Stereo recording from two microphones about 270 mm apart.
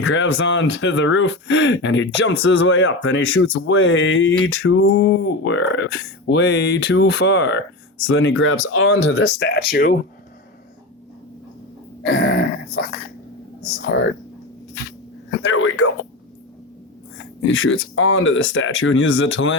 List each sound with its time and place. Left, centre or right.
0.0 s speech: left
12.0 s speech: left
15.3 s speech: left
17.4 s speech: left